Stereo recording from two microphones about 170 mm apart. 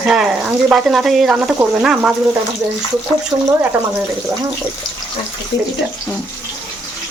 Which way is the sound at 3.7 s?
10° right (ahead or behind).